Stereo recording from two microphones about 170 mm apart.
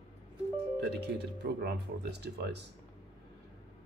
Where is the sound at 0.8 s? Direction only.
80° right.